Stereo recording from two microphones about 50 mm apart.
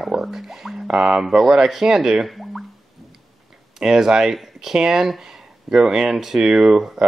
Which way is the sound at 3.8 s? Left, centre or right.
Centre.